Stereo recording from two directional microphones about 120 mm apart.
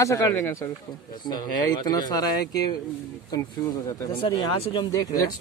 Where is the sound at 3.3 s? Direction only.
25° left (ahead or behind); by 4.9 s 40° left (ahead or behind).